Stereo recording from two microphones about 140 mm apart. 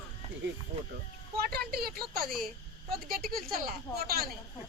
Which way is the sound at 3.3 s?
90° right.